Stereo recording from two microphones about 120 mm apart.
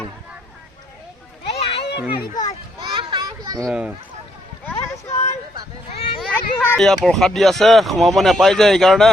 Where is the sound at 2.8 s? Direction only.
40° right (ahead or behind).